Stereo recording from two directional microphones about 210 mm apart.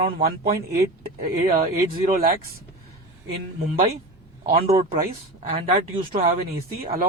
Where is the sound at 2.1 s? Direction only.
45° right (ahead or behind).